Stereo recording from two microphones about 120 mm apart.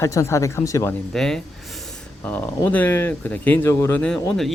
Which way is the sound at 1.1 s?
5° left (ahead or behind).